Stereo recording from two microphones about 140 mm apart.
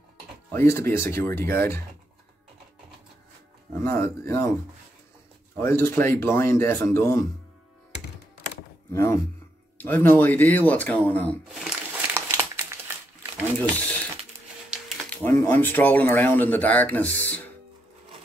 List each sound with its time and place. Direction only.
0.5 s speech: 20° left (ahead or behind)
3.7 s speech: 20° left (ahead or behind)
5.6 s speech: 20° left (ahead or behind)
8.9 s speech: 20° left (ahead or behind)
11.4 s crumpling: 5° right (ahead or behind)
12.1 s a sound: 20° right (ahead or behind)
13.6 s speech: 10° left (ahead or behind)
15.0 s speech: 15° left (ahead or behind)